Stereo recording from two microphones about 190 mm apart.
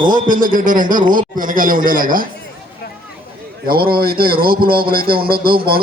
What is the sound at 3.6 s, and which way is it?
A man's voice, 50° right (ahead or behind).